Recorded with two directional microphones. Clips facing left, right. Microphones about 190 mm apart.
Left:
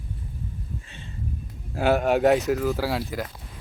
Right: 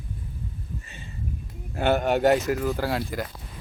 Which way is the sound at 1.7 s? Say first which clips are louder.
Left 1 dB; centre (ahead or behind).